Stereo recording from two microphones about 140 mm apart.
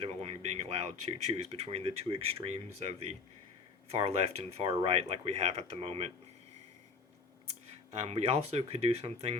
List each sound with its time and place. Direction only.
0.0 s speech: 45° right (ahead or behind)
7.4 s speech: 50° right (ahead or behind)